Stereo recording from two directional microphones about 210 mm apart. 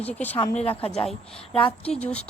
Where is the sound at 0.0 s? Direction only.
5° left (ahead or behind).